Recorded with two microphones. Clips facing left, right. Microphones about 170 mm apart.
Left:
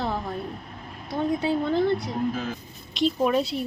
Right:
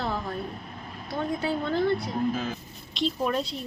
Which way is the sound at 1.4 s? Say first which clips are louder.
Left 2 dB; 20° left (ahead or behind).